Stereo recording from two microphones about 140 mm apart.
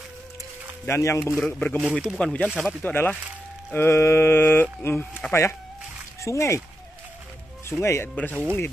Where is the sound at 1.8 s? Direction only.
10° right (ahead or behind).